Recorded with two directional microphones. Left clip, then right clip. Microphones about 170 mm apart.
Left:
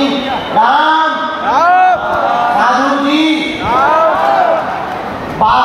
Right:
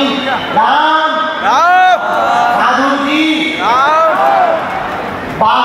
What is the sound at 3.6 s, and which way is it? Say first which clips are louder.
Basketball bounce: right 1 dB; 50° right (ahead or behind).